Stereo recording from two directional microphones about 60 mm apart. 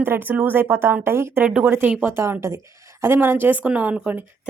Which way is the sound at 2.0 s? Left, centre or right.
Right.